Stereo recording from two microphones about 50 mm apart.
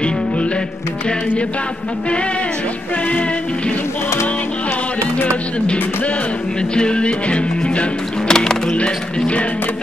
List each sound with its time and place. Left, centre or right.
6.7 s music: centre
8.3 s music: centre
8.7 s music: left